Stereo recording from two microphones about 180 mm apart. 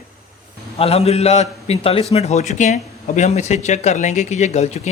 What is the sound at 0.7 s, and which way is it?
Speech, 35° left (ahead or behind).